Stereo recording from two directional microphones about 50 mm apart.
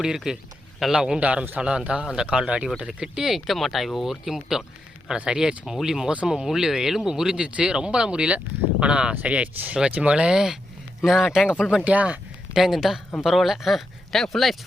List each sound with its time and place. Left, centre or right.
0.3 s speech: centre
1.2 s speech: right
10.3 s speech: centre
11.9 s speech: right
12.5 s speech: centre